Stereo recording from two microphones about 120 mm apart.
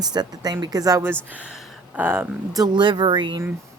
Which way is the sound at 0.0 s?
35° right (ahead or behind).